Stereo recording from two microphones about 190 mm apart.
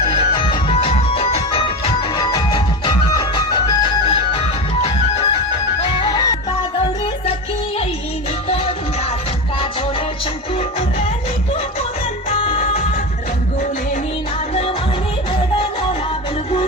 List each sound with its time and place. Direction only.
0.0 s music: 30° left (ahead or behind)
12.4 s music: 30° left (ahead or behind)